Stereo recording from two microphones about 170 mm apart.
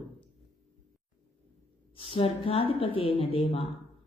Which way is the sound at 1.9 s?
30° left (ahead or behind).